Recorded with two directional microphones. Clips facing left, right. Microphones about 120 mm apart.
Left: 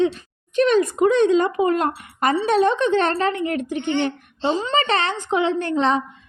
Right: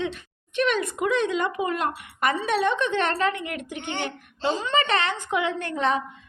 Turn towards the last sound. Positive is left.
turn(degrees=30)  # may be behind; listen again after turning